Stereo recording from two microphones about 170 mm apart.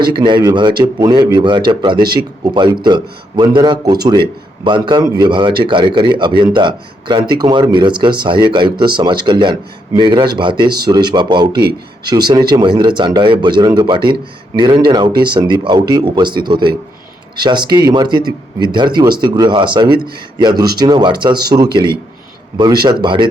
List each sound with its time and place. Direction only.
0.0 s speech: 30° right (ahead or behind)